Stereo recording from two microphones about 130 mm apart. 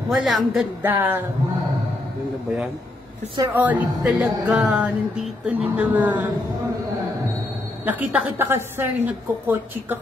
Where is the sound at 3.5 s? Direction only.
15° right (ahead or behind).